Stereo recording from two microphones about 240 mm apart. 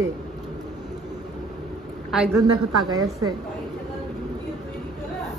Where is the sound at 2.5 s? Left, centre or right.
Right.